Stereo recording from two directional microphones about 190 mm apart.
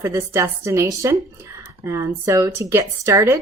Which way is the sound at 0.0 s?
15° right (ahead or behind).